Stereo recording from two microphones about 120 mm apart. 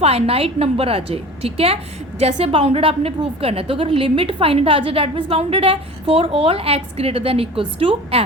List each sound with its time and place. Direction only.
0.0 s a woman's voice: 60° right (ahead or behind)